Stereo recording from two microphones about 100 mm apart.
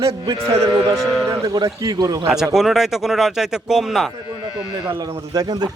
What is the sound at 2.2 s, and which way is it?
A man's voice, 5° right (ahead or behind).